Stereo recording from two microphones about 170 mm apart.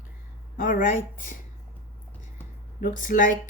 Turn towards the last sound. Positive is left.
turn(degrees=50)  # may be behind; listen again after turning